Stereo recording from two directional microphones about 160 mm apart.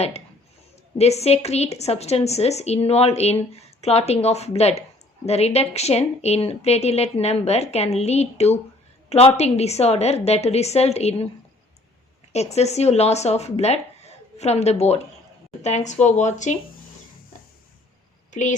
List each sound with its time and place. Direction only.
0.9 s speech: 40° left (ahead or behind)
12.3 s speech: 45° left (ahead or behind)
18.3 s speech: 50° left (ahead or behind)